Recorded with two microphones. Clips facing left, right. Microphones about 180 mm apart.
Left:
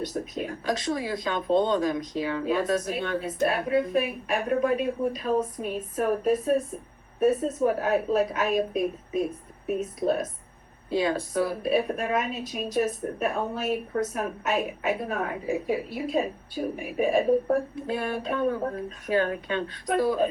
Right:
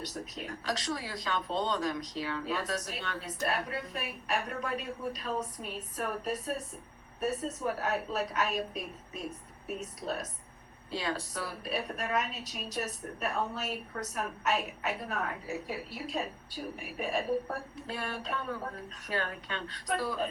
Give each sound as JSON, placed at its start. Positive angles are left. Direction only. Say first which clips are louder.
{"t": 0.0, "sound": "a woman's voice", "louder": "left 9 dB", "side_deg": 50}